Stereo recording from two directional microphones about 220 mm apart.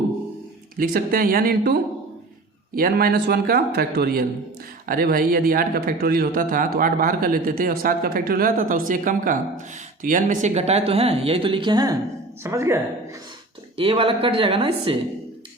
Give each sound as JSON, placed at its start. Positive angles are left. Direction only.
{"t": 0.8, "sound": "a man's voice", "side_deg": -40}
{"t": 13.7, "sound": "speech", "side_deg": -25}